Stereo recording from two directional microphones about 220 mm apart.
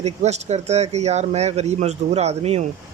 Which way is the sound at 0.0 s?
30° right (ahead or behind).